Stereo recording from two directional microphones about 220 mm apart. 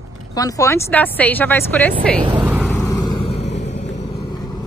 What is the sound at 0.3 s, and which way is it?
A woman's voice, 15° left (ahead or behind).